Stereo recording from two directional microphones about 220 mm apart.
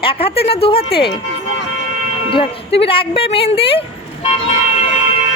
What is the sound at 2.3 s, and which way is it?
A woman's voice, 25° left (ahead or behind).